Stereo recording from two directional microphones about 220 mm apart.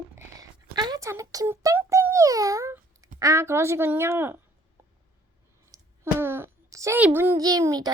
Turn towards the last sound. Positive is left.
turn(degrees=-15)  # may be behind; listen again after turning